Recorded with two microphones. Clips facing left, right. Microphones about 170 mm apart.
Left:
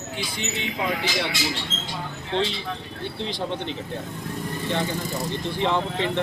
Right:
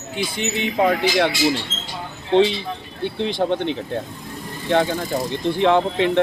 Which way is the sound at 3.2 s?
60° right (ahead or behind).